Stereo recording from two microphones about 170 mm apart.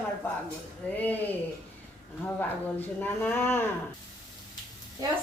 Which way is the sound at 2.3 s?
10° left (ahead or behind).